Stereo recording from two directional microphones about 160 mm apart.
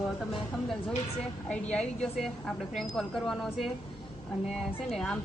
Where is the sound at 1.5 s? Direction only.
5° left (ahead or behind).